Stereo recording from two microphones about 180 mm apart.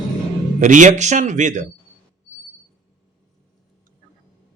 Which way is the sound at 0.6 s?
45° right (ahead or behind).